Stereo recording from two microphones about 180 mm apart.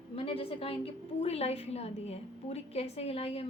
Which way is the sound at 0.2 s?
30° left (ahead or behind).